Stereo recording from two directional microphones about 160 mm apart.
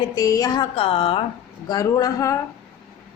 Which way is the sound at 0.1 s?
25° left (ahead or behind).